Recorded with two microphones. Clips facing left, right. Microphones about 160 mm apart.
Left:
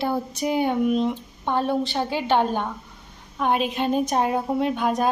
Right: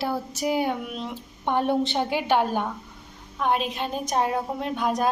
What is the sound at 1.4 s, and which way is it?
A woman's voice, 15° right (ahead or behind).